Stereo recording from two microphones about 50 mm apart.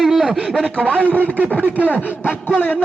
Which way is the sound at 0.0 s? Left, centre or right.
Centre.